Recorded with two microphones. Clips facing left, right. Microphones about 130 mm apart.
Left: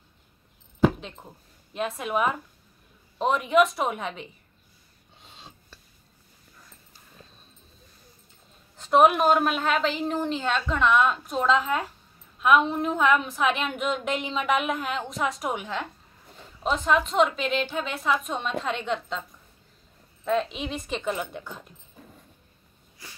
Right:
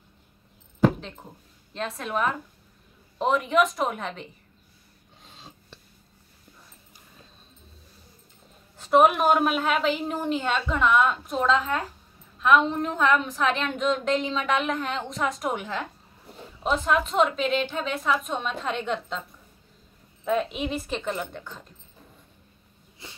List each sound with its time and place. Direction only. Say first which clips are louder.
0.8 s a sound: even; 5° left (ahead or behind)
1.7 s a woman's voice: left 2 dB; 10° left (ahead or behind)
5.2 s filing: even; centre (ahead or behind)
8.7 s a woman's voice: even; 5° right (ahead or behind)
20.2 s a woman's voice: right 1 dB; 5° right (ahead or behind); by 21.6 s 10° left (ahead or behind)
23.0 s wheeze: right 2 dB; 25° right (ahead or behind)